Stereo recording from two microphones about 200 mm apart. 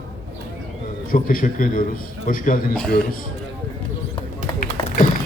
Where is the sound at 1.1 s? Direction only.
45° left (ahead or behind).